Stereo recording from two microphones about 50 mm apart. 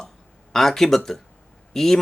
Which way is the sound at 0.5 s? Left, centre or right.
Centre.